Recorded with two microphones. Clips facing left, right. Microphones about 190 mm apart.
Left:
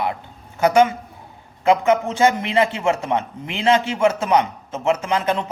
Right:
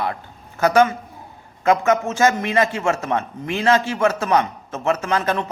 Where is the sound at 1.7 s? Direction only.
15° left (ahead or behind).